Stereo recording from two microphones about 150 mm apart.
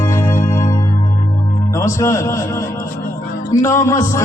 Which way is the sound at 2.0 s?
20° left (ahead or behind).